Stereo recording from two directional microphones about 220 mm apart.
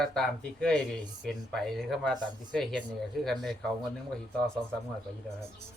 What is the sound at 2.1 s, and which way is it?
Speech, 20° right (ahead or behind).